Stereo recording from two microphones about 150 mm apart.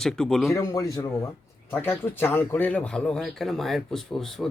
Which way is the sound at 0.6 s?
20° left (ahead or behind).